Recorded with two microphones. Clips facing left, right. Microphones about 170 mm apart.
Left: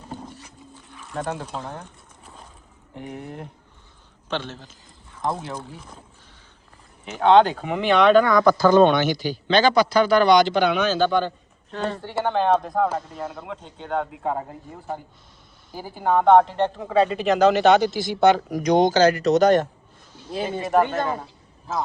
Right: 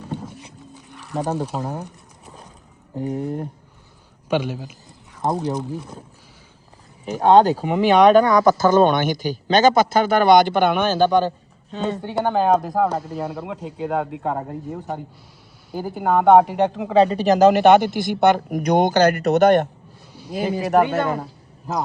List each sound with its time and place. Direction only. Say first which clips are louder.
1.1 s speech: right 5 dB; 35° right (ahead or behind)
1.7 s a sound: right 6 dB; 5° right (ahead or behind)
2.9 s speech: right 10 dB; 40° right (ahead or behind)
4.3 s speech: right 7 dB; 10° right (ahead or behind)
5.2 s speech: right 5 dB; 40° right (ahead or behind)
5.5 s speech: right 9 dB; 20° right (ahead or behind)
7.0 s speech: right 2 dB; 40° right (ahead or behind)
12.2 s speech: right 2 dB; 5° right (ahead or behind)
16.9 s speech: right 4 dB; 35° right (ahead or behind); by 19.6 s 60° right (ahead or behind)
20.5 s speech: right 3 dB; centre (ahead or behind)